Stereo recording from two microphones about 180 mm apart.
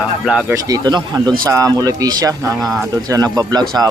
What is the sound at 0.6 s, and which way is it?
Speech, 20° right (ahead or behind).